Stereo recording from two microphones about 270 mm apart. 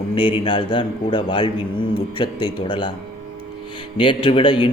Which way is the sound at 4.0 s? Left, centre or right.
Centre.